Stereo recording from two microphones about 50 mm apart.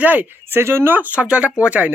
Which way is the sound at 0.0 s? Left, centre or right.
Right.